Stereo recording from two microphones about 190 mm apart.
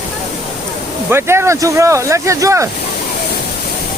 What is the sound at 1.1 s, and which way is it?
Speech, 15° right (ahead or behind).